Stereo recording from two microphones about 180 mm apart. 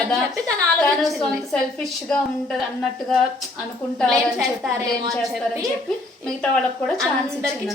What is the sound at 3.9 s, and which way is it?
Speech, 5° left (ahead or behind).